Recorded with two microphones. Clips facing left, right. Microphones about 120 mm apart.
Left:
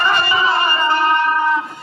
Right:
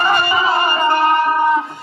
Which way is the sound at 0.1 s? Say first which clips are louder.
Right 1 dB; 45° right (ahead or behind).